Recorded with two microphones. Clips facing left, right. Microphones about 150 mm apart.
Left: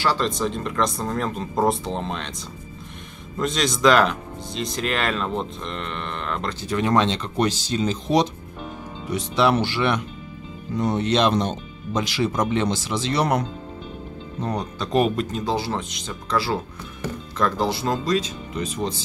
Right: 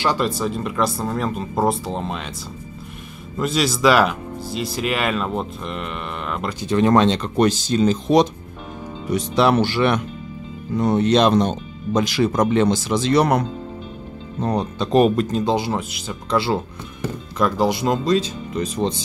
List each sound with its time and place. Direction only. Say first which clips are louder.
0.0 s speech: right 2 dB; 10° right (ahead or behind)
3.3 s speech: right 3 dB; 5° right (ahead or behind)
6.8 s speech: right 5 dB; 45° right (ahead or behind)
14.4 s speech: right 5 dB; 30° right (ahead or behind)
15.0 s speech: right 5 dB; 40° right (ahead or behind)
15.4 s speech: right 4 dB; 15° right (ahead or behind)
16.3 s speech: right 4 dB; 25° right (ahead or behind)
17.4 s speech: right 4 dB; 10° right (ahead or behind)
18.1 s speech: right 4 dB; 30° right (ahead or behind)